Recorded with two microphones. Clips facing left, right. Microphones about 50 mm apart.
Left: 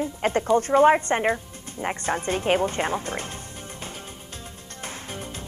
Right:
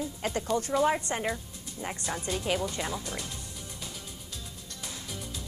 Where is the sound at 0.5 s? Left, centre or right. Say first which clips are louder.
Left 9 dB; left.